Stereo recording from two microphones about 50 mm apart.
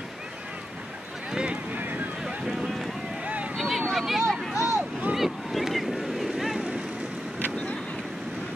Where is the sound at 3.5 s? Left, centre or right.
Centre.